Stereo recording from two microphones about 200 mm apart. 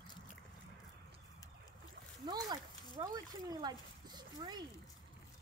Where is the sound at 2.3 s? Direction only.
20° right (ahead or behind).